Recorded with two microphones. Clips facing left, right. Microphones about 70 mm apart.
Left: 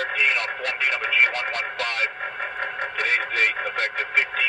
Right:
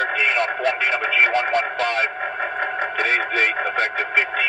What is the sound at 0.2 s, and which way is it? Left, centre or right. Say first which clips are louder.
Radio: right 3 dB; right.